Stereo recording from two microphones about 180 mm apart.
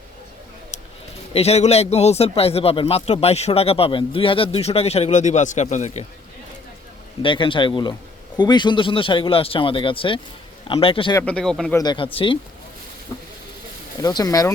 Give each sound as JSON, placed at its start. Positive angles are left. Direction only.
{"t": 1.3, "sound": "a man's voice", "side_deg": 35}
{"t": 7.2, "sound": "speech", "side_deg": 25}
{"t": 11.2, "sound": "speech", "side_deg": 5}
{"t": 11.8, "sound": "speech", "side_deg": 25}
{"t": 14.0, "sound": "speech", "side_deg": 20}